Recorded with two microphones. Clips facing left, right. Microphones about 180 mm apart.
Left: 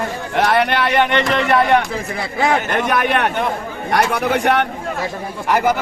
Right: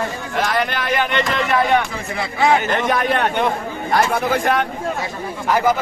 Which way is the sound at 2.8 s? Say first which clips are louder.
Left 1 dB; 70° left (ahead or behind).